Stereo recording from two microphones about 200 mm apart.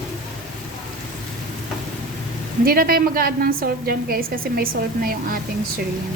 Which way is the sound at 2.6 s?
45° right (ahead or behind).